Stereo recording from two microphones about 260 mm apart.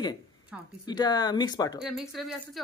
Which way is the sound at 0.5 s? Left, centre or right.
Centre.